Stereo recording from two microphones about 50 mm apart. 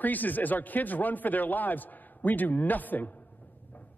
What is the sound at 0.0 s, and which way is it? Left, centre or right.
A man's voice, left.